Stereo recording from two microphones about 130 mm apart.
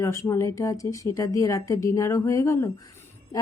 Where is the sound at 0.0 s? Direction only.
25° left (ahead or behind).